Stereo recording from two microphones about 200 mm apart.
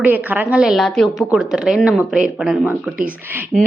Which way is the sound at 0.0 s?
10° right (ahead or behind).